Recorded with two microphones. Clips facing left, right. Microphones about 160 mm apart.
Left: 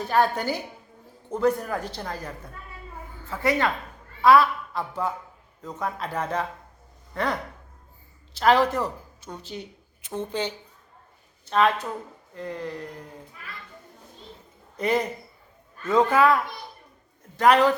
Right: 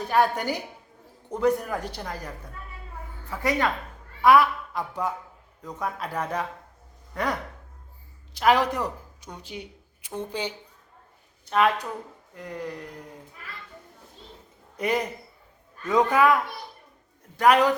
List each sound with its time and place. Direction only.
0.0 s a man's voice: 15° right (ahead or behind)
14.8 s a man's voice: 10° right (ahead or behind)